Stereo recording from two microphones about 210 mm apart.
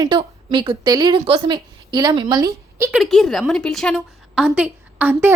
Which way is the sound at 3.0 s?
Centre (ahead or behind).